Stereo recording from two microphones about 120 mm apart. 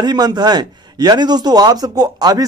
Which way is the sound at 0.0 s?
35° right (ahead or behind).